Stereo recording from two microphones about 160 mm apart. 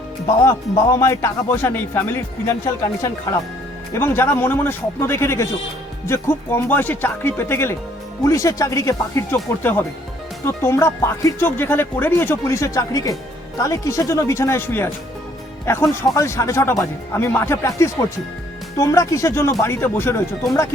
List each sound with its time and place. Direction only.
0.9 s speech: 20° left (ahead or behind)
3.9 s speech: 15° left (ahead or behind)